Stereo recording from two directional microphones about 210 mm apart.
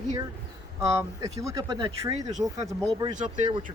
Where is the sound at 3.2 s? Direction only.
35° right (ahead or behind).